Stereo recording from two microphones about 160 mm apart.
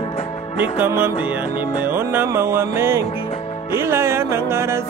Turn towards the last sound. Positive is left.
turn(degrees=-15)  # may be behind; listen again after turning